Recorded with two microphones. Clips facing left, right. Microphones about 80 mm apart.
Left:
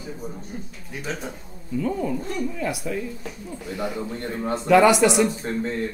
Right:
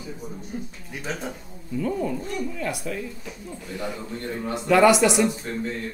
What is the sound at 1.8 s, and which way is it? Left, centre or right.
Speech, centre.